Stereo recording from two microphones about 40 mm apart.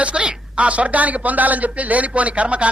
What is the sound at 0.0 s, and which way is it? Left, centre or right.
A man's voice, right.